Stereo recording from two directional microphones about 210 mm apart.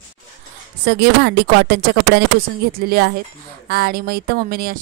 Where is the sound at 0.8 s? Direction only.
50° right (ahead or behind).